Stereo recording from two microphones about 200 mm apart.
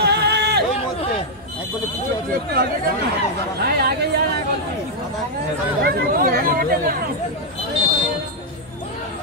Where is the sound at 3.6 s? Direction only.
50° right (ahead or behind).